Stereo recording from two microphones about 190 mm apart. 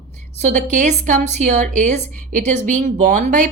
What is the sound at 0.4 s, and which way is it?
A woman's voice, 40° right (ahead or behind).